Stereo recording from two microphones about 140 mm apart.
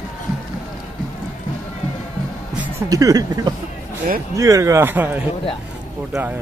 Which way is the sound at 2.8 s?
25° right (ahead or behind).